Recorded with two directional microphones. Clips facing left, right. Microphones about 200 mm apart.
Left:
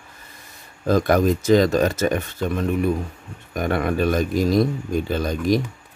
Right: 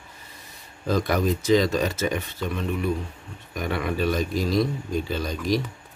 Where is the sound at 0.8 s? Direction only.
50° left (ahead or behind).